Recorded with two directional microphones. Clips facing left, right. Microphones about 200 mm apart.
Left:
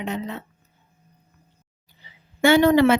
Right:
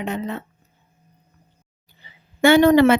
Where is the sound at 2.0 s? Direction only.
55° right (ahead or behind).